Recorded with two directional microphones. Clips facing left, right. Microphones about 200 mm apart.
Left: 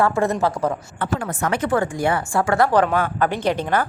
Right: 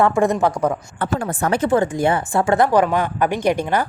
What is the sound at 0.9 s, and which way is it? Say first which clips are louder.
A woman's voice: right 2 dB; 35° right (ahead or behind).